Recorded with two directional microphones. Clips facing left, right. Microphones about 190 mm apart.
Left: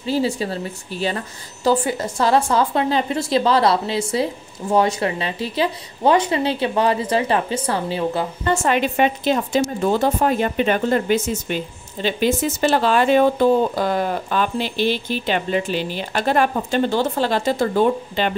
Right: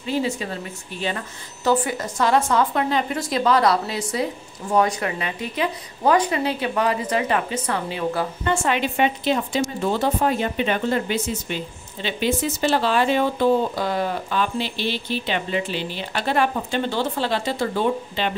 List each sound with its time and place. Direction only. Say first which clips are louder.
0.0 s a woman's voice: left 3 dB; 35° left (ahead or behind)
8.5 s a woman's voice: left 4 dB; 45° left (ahead or behind)